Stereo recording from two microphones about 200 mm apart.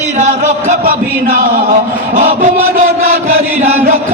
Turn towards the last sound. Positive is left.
turn(degrees=-35)  # may be behind; listen again after turning